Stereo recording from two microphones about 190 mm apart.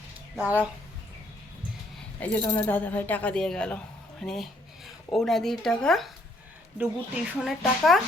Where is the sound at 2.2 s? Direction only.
10° left (ahead or behind).